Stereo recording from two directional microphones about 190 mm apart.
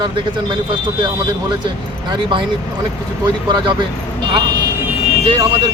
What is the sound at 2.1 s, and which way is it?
Speech, 25° right (ahead or behind).